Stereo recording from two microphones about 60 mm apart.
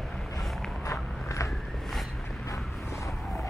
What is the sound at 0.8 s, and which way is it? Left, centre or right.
Biting, left.